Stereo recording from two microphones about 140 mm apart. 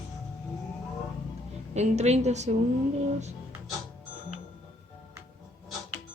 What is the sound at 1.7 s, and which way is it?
Speech, 55° right (ahead or behind).